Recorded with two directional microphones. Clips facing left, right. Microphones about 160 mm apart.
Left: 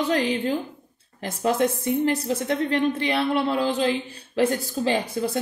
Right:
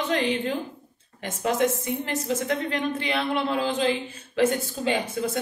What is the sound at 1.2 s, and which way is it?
A woman's voice, 35° left (ahead or behind).